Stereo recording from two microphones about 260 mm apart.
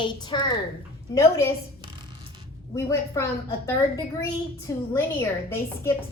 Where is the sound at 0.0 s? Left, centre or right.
Centre.